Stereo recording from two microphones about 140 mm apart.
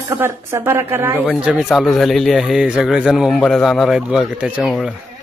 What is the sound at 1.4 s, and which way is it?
Speech, 5° right (ahead or behind).